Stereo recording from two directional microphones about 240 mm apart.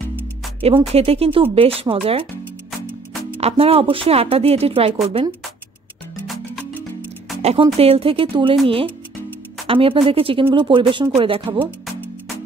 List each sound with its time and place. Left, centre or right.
0.6 s speech: right
3.3 s speech: right
6.2 s music: centre
7.4 s speech: right
11.6 s music: centre